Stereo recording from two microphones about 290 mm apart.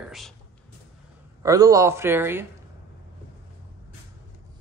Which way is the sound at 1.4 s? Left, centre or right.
Centre.